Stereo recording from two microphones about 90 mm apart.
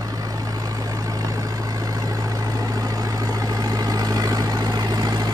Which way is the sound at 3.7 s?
45° right (ahead or behind).